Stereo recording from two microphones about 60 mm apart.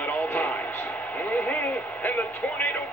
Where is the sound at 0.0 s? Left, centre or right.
Left.